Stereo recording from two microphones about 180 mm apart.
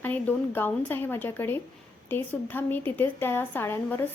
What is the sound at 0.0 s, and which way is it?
A woman's voice, 10° left (ahead or behind).